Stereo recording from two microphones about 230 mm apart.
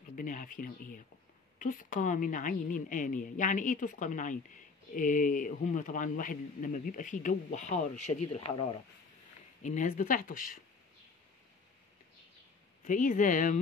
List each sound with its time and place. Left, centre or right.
0.1 s a woman's voice: left
9.6 s a woman's voice: left
12.8 s a woman's voice: left